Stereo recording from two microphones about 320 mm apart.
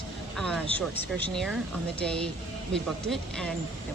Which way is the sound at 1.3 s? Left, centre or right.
Centre.